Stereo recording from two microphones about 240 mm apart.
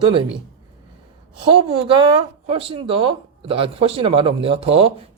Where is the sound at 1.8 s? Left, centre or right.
Right.